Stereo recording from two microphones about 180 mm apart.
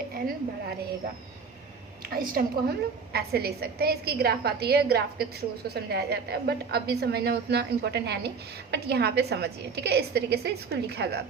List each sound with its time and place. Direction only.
2.1 s a woman's voice: 55° right (ahead or behind)